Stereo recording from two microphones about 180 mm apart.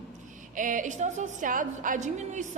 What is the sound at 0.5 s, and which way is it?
A woman's voice, 45° right (ahead or behind).